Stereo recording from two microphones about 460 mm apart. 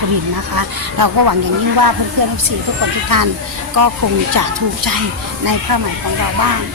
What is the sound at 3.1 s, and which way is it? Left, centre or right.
Speech, right.